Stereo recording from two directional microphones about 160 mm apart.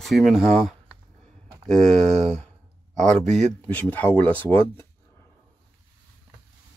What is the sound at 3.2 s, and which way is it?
Speech, 50° right (ahead or behind).